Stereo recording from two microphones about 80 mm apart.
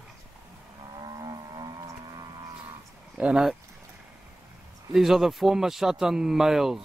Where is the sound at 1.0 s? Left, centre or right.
Right.